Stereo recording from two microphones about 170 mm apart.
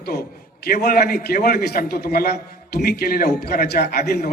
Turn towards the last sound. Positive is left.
turn(degrees=65)  # may be behind; listen again after turning